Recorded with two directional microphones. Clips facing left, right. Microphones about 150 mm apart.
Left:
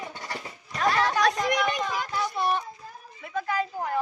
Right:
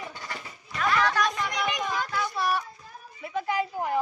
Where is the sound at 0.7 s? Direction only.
35° left (ahead or behind).